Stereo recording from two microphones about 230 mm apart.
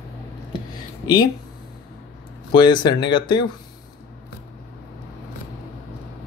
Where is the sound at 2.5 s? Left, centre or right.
Centre.